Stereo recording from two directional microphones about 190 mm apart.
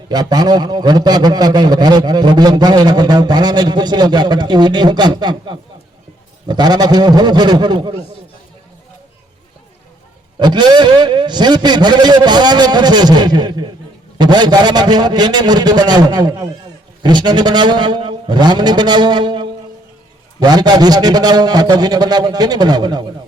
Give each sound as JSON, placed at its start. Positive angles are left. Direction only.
{"t": 0.1, "sound": "a man's voice", "side_deg": -20}
{"t": 10.3, "sound": "a man's voice", "side_deg": -25}